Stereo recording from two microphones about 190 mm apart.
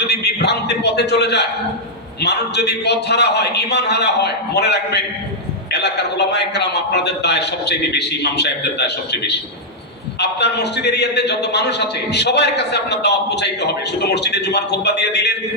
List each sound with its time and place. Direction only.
0.1 s a man's voice: 60° left (ahead or behind)